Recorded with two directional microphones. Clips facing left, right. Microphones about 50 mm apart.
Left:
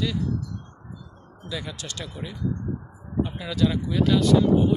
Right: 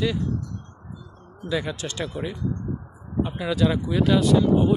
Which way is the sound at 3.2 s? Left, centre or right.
Centre.